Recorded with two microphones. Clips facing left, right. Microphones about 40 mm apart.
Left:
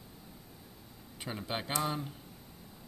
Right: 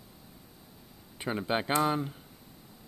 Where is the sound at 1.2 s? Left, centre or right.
Centre.